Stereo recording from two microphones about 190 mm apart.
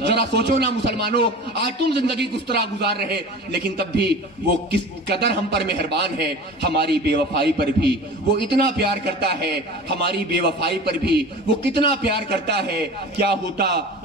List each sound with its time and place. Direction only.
0.0 s a man's voice: 60° right (ahead or behind)